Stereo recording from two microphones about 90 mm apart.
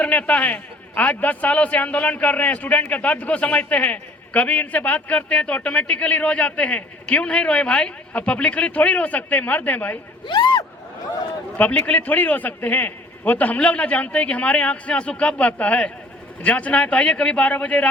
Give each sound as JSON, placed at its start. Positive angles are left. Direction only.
{"t": 0.0, "sound": "a man's voice", "side_deg": 15}
{"t": 10.2, "sound": "speech", "side_deg": 55}
{"t": 11.5, "sound": "a man's voice", "side_deg": 15}